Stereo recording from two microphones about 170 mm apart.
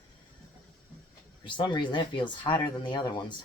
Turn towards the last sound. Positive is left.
turn(degrees=25)  # may be behind; listen again after turning